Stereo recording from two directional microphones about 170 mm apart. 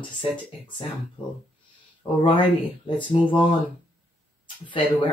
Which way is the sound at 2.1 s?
25° left (ahead or behind).